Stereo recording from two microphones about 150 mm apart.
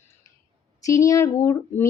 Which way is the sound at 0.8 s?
20° left (ahead or behind).